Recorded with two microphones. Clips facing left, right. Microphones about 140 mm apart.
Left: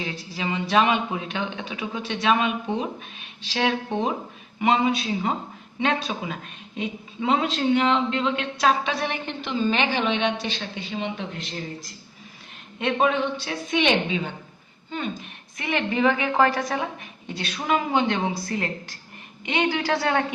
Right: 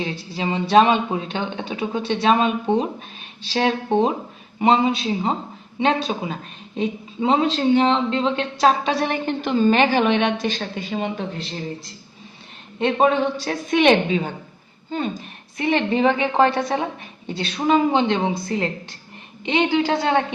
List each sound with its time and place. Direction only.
0.0 s a woman's voice: 30° right (ahead or behind); by 11.3 s 45° right (ahead or behind)
11.3 s a woman's voice: 30° right (ahead or behind)